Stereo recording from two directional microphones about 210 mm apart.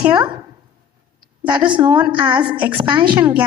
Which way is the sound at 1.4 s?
15° right (ahead or behind).